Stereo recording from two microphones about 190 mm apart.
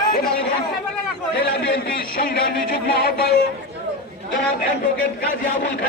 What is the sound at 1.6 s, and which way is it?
Speech, 70° left (ahead or behind).